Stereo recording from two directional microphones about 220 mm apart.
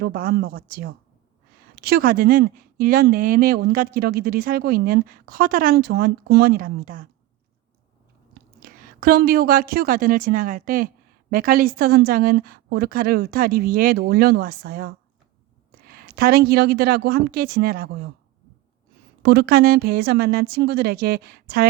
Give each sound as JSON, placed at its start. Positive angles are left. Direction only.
{"t": 0.0, "sound": "a woman's voice", "side_deg": -40}
{"t": 8.6, "sound": "a woman's voice", "side_deg": -40}
{"t": 19.2, "sound": "a woman's voice", "side_deg": -50}